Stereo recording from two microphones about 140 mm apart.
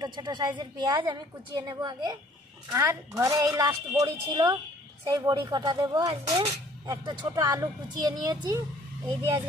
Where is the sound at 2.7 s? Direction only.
20° right (ahead or behind).